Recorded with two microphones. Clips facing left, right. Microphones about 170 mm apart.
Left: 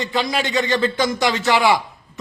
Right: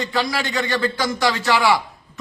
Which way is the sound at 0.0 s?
20° left (ahead or behind).